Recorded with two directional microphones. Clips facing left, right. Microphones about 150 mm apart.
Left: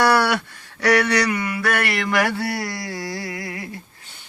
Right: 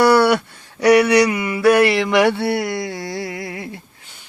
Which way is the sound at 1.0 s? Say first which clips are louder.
Right 6 dB; 15° right (ahead or behind).